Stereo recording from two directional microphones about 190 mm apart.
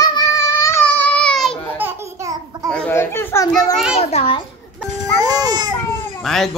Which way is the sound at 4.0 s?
35° left (ahead or behind).